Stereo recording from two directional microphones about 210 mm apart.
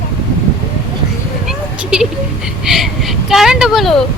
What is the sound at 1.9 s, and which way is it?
Speech, 5° right (ahead or behind).